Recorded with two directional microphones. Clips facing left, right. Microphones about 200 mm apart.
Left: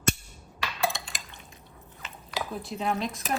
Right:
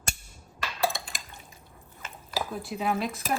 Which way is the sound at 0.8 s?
Centre (ahead or behind).